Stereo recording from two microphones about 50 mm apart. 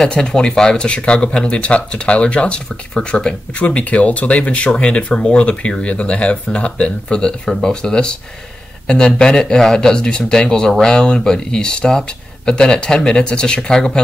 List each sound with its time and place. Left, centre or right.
0.0 s speech: centre